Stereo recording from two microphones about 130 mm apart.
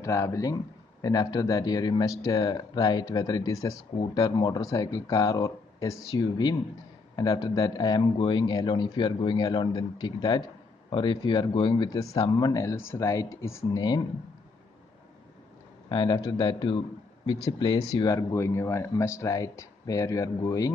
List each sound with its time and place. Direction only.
0.0 s speech: 25° left (ahead or behind)
15.9 s speech: 35° left (ahead or behind)
17.7 s speech: 25° left (ahead or behind)